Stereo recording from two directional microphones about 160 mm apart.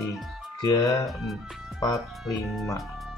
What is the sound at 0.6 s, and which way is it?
Speech, 20° left (ahead or behind).